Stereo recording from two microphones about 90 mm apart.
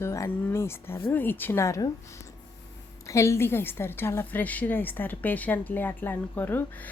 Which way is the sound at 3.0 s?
35° left (ahead or behind).